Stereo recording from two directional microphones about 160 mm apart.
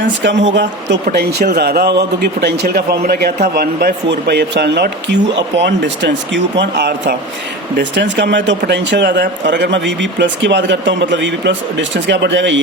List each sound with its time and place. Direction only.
0.2 s speech: 90° right